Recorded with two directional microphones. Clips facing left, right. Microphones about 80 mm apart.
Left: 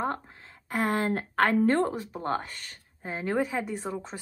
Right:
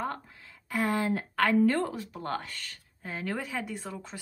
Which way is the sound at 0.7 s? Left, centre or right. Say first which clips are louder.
Left 1 dB; left.